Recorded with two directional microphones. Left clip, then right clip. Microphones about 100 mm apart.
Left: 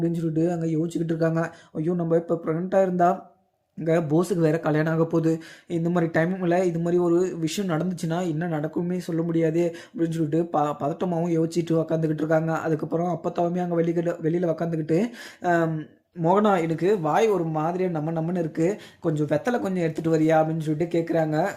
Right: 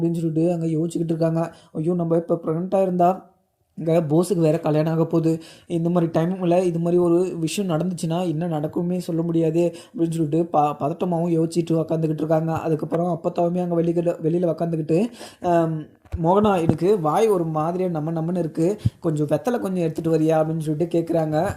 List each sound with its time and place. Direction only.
0.0 s speech: 40° right (ahead or behind)
16.6 s speech: 75° right (ahead or behind); by 21.4 s 55° right (ahead or behind)